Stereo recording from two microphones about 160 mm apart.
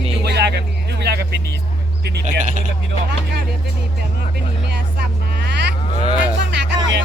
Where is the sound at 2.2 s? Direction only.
50° right (ahead or behind).